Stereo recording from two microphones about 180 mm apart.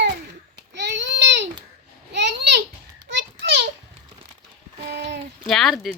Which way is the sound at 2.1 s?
70° right (ahead or behind).